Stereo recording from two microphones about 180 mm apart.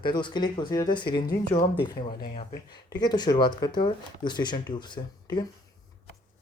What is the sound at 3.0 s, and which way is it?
Speech, 25° left (ahead or behind).